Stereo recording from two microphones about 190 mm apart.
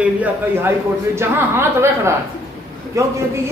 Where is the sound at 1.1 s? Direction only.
15° right (ahead or behind).